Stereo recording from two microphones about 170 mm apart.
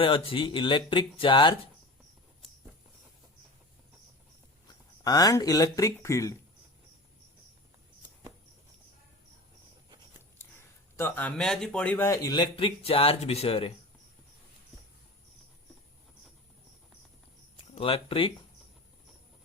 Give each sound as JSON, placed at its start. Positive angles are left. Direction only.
{"t": 0.0, "sound": "a man's voice", "side_deg": 30}
{"t": 4.7, "sound": "speech", "side_deg": 20}
{"t": 10.9, "sound": "a man's voice", "side_deg": 10}
{"t": 17.7, "sound": "speech", "side_deg": 35}